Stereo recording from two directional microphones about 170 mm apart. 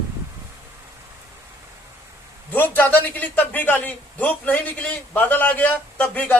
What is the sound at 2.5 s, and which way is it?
A man's voice, 10° left (ahead or behind).